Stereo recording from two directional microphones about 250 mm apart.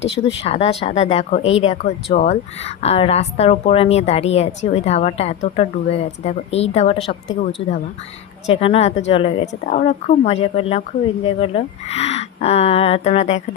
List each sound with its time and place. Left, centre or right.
0.0 s speech: left
0.4 s speech: left